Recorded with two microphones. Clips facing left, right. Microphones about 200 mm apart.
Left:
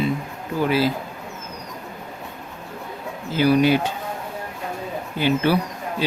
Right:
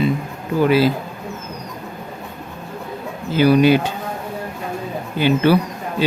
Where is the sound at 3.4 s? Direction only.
75° right (ahead or behind).